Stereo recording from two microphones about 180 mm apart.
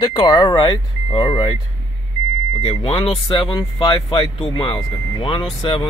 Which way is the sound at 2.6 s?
30° left (ahead or behind).